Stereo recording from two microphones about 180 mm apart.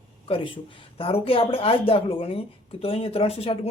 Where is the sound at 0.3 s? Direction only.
30° left (ahead or behind).